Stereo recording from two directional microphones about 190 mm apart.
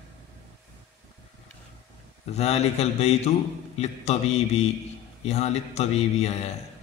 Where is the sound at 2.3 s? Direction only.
35° left (ahead or behind).